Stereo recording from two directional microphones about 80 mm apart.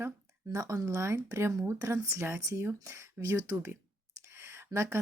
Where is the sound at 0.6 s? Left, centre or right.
Right.